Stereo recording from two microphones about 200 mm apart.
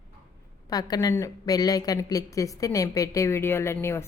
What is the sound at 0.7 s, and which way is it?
A woman's voice, 20° left (ahead or behind).